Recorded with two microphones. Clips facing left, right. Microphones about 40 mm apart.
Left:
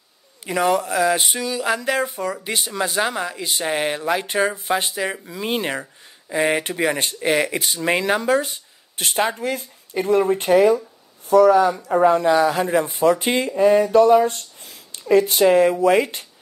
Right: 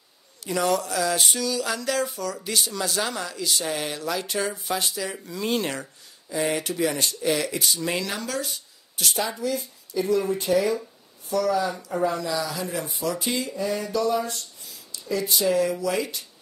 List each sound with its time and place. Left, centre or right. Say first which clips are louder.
0.4 s speech: left 4 dB; left
5.3 s speech: left 2 dB; left
6.2 s speech: left 5 dB; left